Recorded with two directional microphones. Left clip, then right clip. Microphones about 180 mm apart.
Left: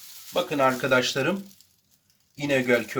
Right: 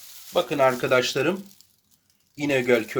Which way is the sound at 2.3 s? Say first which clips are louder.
Right 1 dB; 40° right (ahead or behind).